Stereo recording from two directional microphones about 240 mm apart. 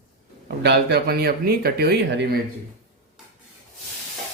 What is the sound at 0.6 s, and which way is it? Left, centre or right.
Speech, right.